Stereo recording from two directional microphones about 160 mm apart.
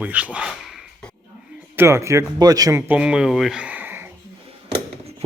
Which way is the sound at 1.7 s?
15° right (ahead or behind).